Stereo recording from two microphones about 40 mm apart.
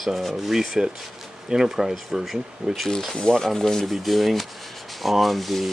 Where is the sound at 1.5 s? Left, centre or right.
Centre.